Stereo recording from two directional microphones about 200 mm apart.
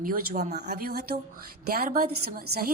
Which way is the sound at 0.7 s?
50° right (ahead or behind).